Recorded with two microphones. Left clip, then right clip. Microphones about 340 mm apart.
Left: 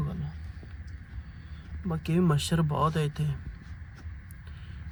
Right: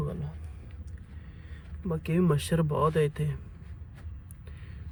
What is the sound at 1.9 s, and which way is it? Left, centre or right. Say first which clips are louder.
Speech: right 1 dB; centre.